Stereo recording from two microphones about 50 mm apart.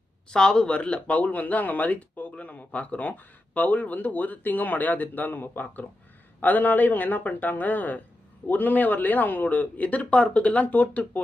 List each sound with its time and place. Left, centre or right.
0.3 s speech: centre; by 11.2 s left